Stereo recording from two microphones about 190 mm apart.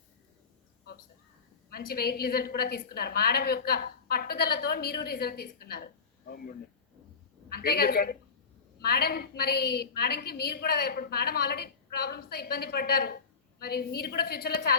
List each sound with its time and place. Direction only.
1.7 s a woman's voice: 55° left (ahead or behind)
7.5 s a woman's voice: 55° left (ahead or behind)